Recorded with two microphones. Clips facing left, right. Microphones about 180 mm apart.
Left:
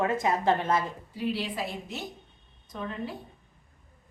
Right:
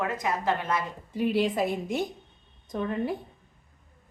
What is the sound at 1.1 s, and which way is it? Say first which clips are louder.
A woman's voice: right 7 dB; 50° right (ahead or behind).